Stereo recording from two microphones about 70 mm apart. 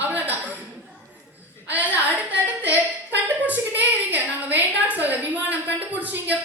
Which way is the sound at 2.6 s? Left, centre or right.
Right.